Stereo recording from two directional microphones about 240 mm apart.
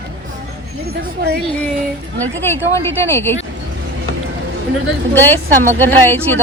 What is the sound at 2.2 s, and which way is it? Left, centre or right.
Speech, centre.